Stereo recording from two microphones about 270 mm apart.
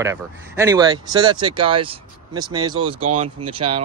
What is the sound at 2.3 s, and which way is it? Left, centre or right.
Speech, right.